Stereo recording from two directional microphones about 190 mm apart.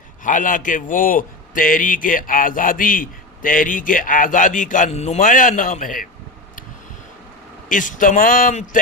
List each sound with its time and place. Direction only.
0.3 s a man's voice: 45° left (ahead or behind)
7.7 s a man's voice: 45° left (ahead or behind)